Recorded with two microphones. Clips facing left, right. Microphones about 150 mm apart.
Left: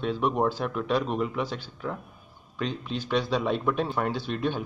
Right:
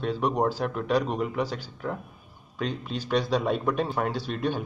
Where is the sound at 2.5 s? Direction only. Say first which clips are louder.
Even; 5° right (ahead or behind).